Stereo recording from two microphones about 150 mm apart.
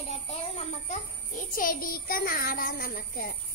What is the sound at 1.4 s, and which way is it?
A child's voice, 70° left (ahead or behind).